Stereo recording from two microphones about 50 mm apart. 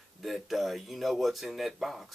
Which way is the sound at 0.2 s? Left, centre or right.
Centre.